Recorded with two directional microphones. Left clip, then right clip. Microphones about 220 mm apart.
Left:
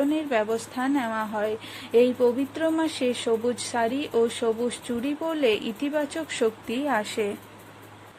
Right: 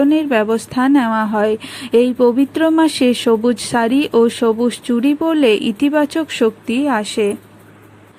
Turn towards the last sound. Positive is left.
turn(degrees=-15)  # may be behind; listen again after turning